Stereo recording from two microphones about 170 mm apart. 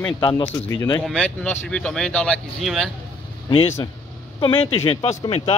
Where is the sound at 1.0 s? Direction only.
5° left (ahead or behind).